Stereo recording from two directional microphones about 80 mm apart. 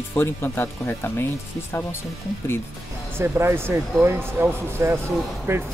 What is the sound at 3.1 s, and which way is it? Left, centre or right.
Speech, right.